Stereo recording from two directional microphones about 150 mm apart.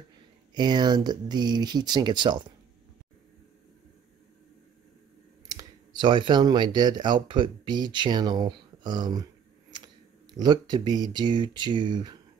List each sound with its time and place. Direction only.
0.6 s speech: 30° right (ahead or behind)
5.5 s speech: 25° right (ahead or behind)